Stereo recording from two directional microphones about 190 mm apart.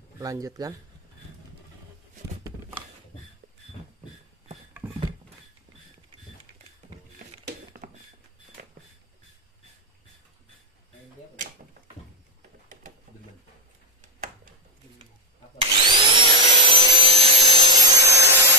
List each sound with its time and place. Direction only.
0.2 s speech: 20° right (ahead or behind)
7.4 s a sound: 55° right (ahead or behind)
15.6 s vacuum cleaner: 25° right (ahead or behind)